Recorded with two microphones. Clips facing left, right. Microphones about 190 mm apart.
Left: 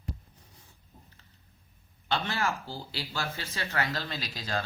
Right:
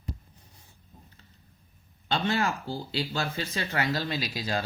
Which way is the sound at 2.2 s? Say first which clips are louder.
Right 4 dB; 20° right (ahead or behind).